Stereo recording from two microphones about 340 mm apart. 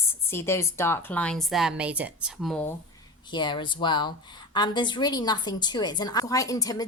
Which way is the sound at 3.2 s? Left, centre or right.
Centre.